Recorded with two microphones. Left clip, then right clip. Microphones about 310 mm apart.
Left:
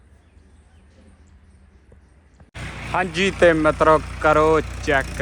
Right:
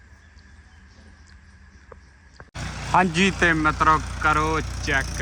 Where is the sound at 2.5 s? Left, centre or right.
Right.